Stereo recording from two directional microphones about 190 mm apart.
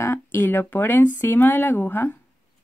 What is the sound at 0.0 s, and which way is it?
Speech, 10° left (ahead or behind).